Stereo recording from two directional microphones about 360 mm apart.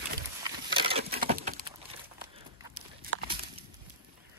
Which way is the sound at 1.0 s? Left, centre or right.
Right.